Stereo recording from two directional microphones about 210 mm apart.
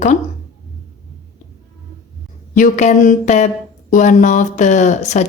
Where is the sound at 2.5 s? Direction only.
35° left (ahead or behind).